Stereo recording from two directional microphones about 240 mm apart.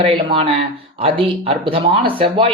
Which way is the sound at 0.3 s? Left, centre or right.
Right.